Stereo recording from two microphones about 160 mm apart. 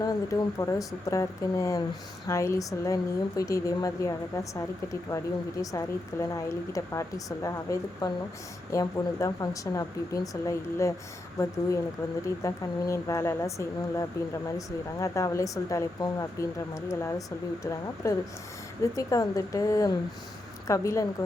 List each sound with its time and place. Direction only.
0.0 s speech: 20° left (ahead or behind)